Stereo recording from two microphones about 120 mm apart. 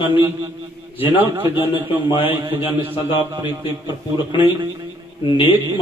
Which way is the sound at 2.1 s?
45° left (ahead or behind).